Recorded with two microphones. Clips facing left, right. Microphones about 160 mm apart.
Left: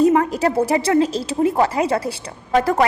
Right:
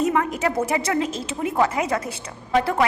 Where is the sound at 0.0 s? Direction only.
35° left (ahead or behind).